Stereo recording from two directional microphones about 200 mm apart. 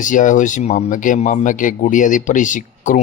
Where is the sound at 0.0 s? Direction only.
40° left (ahead or behind).